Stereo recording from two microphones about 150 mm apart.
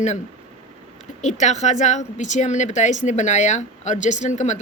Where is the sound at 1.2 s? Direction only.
50° left (ahead or behind).